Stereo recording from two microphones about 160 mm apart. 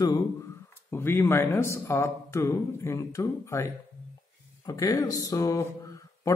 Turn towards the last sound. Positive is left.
turn(degrees=20)  # may be behind; listen again after turning